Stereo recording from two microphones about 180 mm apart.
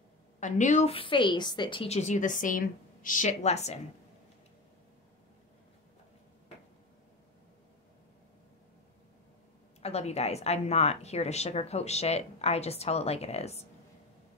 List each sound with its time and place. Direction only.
0.4 s a woman's voice: 45° left (ahead or behind)
9.8 s a woman's voice: 35° left (ahead or behind)